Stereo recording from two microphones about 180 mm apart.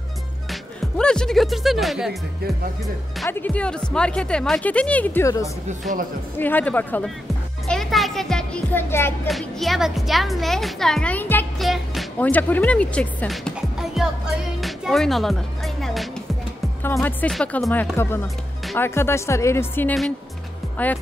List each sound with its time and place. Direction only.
0.5 s speech: 5° left (ahead or behind)
3.3 s speech: 10° left (ahead or behind)
5.7 s speech: 45° right (ahead or behind)
6.3 s speech: 10° left (ahead or behind)
7.6 s music: centre (ahead or behind)
9.3 s speech: centre (ahead or behind)
11.6 s speech: centre (ahead or behind)
14.6 s music: centre (ahead or behind)
16.8 s speech: 10° left (ahead or behind)
17.9 s speech: 15° left (ahead or behind)